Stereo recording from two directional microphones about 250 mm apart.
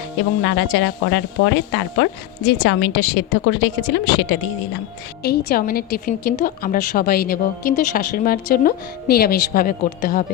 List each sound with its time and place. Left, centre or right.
0.4 s a woman's voice: left